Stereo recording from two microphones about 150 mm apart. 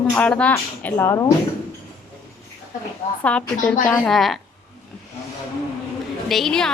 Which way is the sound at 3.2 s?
10° left (ahead or behind).